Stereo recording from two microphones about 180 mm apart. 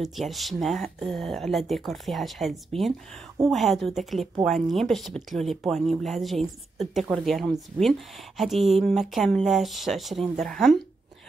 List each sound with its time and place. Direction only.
0.0 s speech: centre (ahead or behind)